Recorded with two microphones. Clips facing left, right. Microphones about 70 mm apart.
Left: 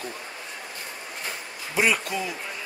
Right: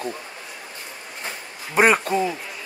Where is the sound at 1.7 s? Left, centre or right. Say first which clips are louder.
Right 7 dB; right.